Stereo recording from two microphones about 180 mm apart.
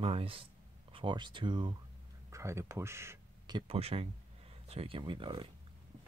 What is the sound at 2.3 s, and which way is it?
Speech, 15° right (ahead or behind).